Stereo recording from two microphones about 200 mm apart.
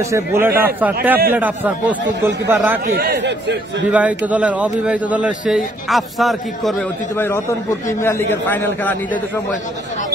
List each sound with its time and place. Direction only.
0.1 s a man's voice: 10° right (ahead or behind)
3.0 s a man's voice: 55° right (ahead or behind)
3.9 s a man's voice: 5° right (ahead or behind)
8.0 s a man's voice: 10° left (ahead or behind)